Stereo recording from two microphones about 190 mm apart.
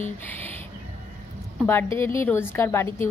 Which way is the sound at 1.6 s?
10° left (ahead or behind).